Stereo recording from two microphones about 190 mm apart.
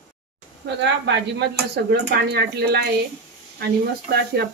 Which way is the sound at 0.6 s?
65° right (ahead or behind).